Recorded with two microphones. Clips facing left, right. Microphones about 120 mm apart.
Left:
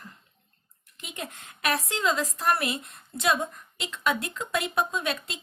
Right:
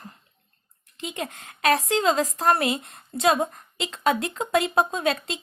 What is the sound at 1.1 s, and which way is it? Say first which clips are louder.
Speech: right 1 dB; 90° right.